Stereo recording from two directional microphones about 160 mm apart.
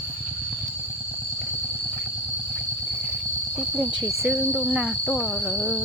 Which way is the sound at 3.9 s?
20° right (ahead or behind).